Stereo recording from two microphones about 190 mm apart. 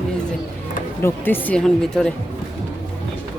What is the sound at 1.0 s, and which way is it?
Speech, 10° left (ahead or behind).